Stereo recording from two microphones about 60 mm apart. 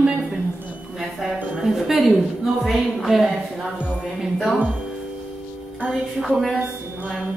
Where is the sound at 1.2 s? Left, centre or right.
Centre.